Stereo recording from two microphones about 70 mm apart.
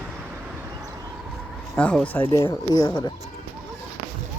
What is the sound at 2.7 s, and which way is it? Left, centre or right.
Speech, left.